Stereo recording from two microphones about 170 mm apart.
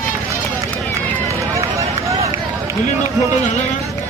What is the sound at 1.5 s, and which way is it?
Run, 20° right (ahead or behind).